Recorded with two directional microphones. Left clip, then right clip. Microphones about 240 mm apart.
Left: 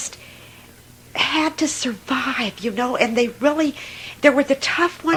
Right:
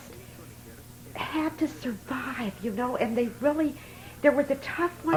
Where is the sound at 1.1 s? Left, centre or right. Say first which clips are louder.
Left 11 dB; left.